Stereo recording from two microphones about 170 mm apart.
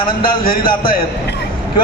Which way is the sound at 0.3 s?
60° left (ahead or behind).